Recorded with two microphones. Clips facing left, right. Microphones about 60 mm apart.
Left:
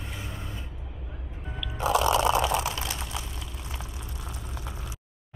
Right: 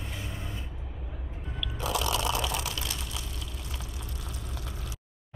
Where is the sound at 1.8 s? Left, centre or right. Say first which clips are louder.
Left 7 dB; left.